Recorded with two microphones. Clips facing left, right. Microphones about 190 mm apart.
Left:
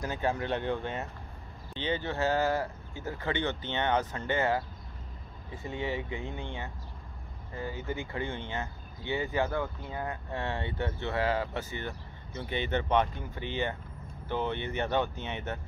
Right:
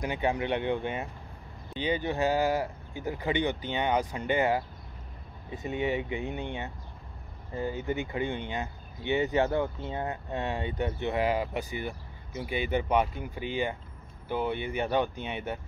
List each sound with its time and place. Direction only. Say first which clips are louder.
0.0 s speech: right 2 dB; 15° right (ahead or behind)